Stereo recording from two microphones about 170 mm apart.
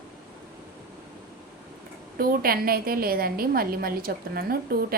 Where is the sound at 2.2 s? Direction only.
60° right (ahead or behind).